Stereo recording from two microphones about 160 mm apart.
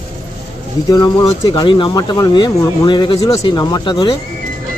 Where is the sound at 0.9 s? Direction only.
25° left (ahead or behind).